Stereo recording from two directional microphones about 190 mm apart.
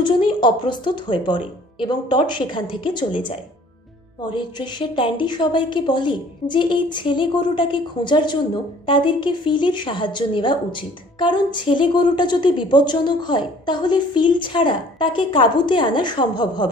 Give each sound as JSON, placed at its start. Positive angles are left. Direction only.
{"t": 0.0, "sound": "a woman's voice", "side_deg": 25}
{"t": 4.3, "sound": "a woman's voice", "side_deg": 25}